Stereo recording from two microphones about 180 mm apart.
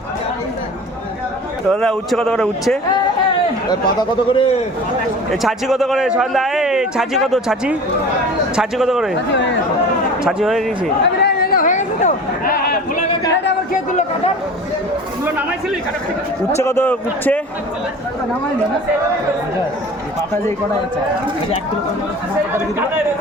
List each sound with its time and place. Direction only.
1.7 s speech: 5° left (ahead or behind)
3.7 s a man's voice: 25° left (ahead or behind)
5.3 s speech: centre (ahead or behind)
10.2 s speech: centre (ahead or behind)
11.2 s chatter: 55° left (ahead or behind)
16.6 s a man's voice: 15° left (ahead or behind)